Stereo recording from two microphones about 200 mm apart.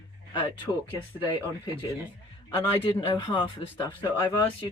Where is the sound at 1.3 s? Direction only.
20° left (ahead or behind).